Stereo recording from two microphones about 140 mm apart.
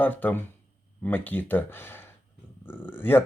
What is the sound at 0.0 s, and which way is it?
Speech, 10° left (ahead or behind).